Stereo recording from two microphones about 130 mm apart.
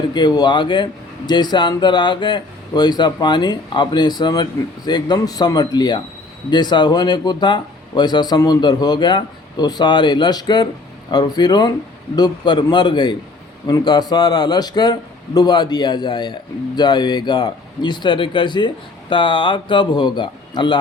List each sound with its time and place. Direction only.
0.1 s speech: 35° left (ahead or behind)